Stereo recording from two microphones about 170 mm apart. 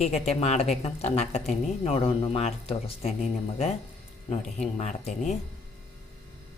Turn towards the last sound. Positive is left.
turn(degrees=40)  # may be behind; listen again after turning